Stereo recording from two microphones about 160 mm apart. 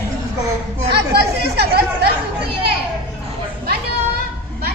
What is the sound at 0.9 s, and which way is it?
Speech, 90° right.